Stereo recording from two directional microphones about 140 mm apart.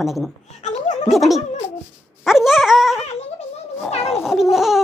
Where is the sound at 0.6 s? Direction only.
55° left (ahead or behind).